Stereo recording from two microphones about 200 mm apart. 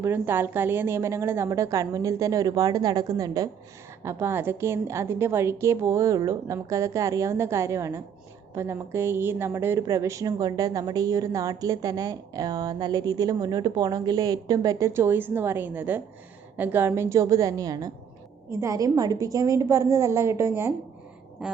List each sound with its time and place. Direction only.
0.0 s a woman's voice: 10° right (ahead or behind)